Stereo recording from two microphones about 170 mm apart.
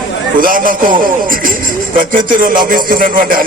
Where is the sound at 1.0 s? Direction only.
55° right (ahead or behind).